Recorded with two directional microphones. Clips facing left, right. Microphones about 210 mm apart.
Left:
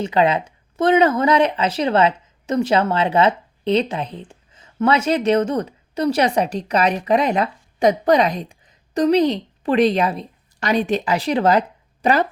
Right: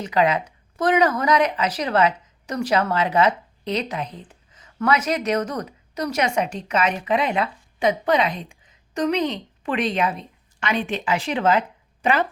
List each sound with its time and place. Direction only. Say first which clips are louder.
0.0 s speech: left 3 dB; 25° left (ahead or behind)